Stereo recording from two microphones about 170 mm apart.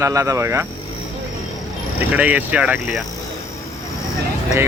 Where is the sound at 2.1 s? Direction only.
10° right (ahead or behind).